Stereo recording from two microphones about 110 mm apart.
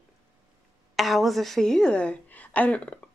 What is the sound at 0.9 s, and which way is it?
A woman's voice, centre (ahead or behind).